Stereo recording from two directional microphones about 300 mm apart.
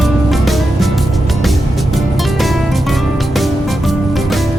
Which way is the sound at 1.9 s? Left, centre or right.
Centre.